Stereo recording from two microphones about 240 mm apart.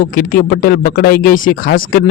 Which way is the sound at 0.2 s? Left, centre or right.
Left.